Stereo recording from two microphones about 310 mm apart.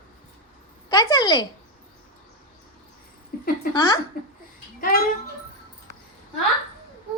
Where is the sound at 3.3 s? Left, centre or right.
Left.